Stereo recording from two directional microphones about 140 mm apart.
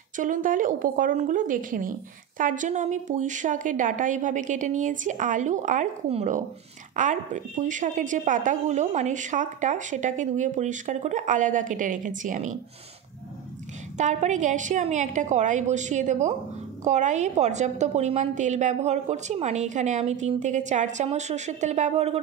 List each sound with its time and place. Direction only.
0.1 s a woman's voice: 65° right (ahead or behind)
7.0 s a woman's voice: 65° right (ahead or behind)
13.9 s a woman's voice: 60° right (ahead or behind)